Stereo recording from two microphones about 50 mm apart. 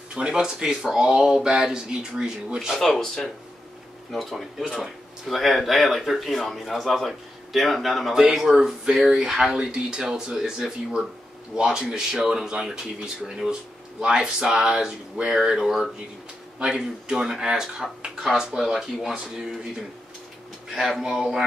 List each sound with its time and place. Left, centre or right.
0.1 s speech: centre
2.8 s speech: centre
11.5 s speech: centre